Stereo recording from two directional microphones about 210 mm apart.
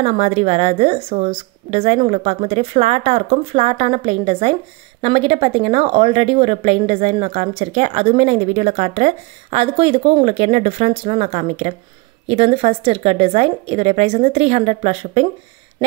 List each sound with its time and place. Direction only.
0.0 s speech: 30° right (ahead or behind)